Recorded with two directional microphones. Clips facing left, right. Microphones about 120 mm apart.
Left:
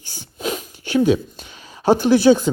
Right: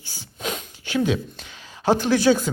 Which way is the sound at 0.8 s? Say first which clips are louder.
Left 6 dB; 40° left (ahead or behind).